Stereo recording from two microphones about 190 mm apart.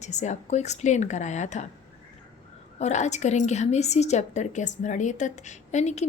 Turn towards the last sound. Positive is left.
turn(degrees=35)  # may be behind; listen again after turning